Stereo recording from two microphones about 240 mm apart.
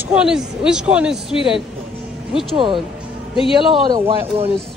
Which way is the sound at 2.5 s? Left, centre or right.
Right.